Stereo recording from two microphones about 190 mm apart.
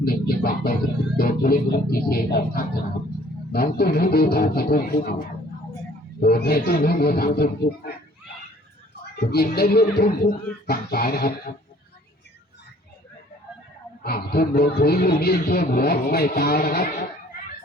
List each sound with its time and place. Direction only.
0.0 s a man's voice: 50° left (ahead or behind)
6.1 s a man's voice: 55° left (ahead or behind)
9.1 s a man's voice: 55° left (ahead or behind)
10.0 s speech: 40° left (ahead or behind)
10.9 s speech: 55° left (ahead or behind)
14.0 s a man's voice: 55° left (ahead or behind)